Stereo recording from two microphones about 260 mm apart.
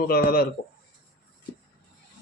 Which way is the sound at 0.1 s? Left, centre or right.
Left.